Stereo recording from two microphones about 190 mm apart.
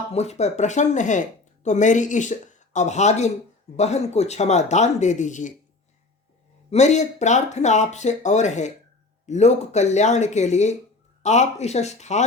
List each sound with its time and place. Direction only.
0.1 s speech: 35° left (ahead or behind)
6.7 s speech: 35° left (ahead or behind)